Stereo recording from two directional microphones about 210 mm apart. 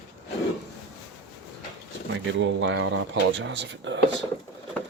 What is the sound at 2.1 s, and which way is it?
Speech, 60° right (ahead or behind).